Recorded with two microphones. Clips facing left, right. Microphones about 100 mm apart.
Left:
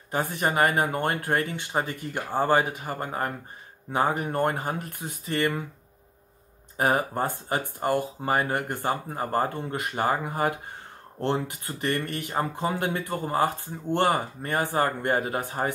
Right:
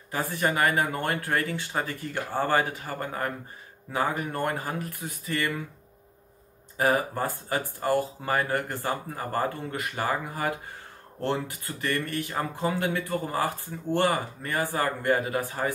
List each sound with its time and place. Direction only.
0.1 s speech: 25° left (ahead or behind)
6.8 s speech: 25° left (ahead or behind)